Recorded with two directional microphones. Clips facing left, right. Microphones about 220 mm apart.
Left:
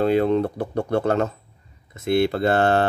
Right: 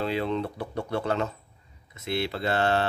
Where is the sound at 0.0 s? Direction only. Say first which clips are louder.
Left 9 dB; 50° left (ahead or behind).